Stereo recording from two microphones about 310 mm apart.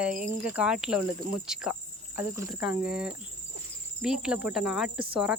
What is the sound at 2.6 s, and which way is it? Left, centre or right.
Speech, left.